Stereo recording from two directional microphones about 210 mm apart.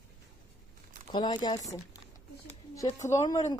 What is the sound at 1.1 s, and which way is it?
Speech, 20° left (ahead or behind).